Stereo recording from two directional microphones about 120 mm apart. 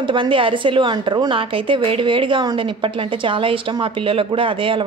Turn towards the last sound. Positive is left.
turn(degrees=-45)  # may be behind; listen again after turning